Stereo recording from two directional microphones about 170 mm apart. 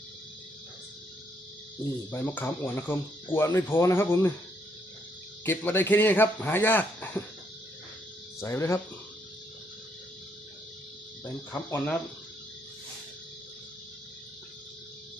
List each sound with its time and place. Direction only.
2.0 s speech: 10° left (ahead or behind)
5.5 s speech: 10° left (ahead or behind)
8.4 s speech: 15° left (ahead or behind)
11.2 s speech: 10° left (ahead or behind)